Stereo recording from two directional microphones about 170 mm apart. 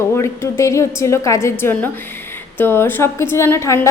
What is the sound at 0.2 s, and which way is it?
A woman's voice, 15° left (ahead or behind).